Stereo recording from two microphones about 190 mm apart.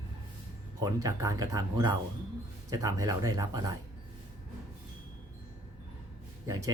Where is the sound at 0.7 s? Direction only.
20° right (ahead or behind).